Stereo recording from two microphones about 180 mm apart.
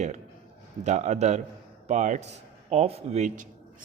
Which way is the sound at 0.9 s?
40° right (ahead or behind).